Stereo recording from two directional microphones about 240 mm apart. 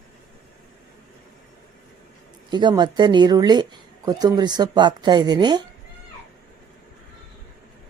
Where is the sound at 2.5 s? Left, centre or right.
Centre.